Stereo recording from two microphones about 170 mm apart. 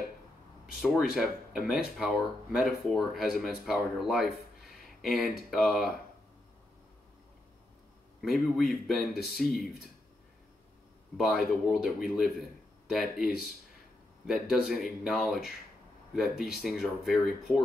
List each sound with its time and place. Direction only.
0.7 s speech: centre (ahead or behind)
8.2 s speech: centre (ahead or behind)
11.1 s speech: centre (ahead or behind)
16.5 s speech: centre (ahead or behind)